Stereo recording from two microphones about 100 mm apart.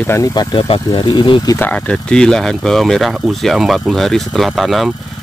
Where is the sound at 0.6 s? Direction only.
60° left (ahead or behind).